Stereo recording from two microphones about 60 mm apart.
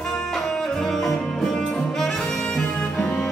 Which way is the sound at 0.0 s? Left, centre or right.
Centre.